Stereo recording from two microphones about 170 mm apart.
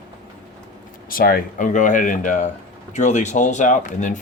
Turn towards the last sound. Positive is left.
turn(degrees=45)  # may be behind; listen again after turning